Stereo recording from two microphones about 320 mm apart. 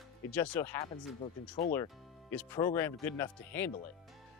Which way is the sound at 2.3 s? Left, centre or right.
Centre.